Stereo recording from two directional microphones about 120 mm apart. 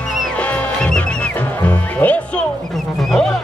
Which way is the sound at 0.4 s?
10° left (ahead or behind).